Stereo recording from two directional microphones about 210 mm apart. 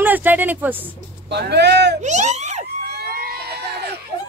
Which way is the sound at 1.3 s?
55° right (ahead or behind).